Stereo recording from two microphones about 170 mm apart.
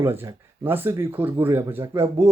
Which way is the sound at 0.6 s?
10° right (ahead or behind).